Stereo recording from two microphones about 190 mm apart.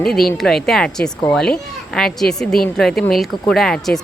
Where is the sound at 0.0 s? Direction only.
Centre (ahead or behind).